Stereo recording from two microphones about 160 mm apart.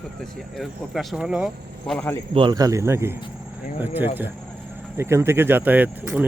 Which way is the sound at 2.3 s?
30° right (ahead or behind).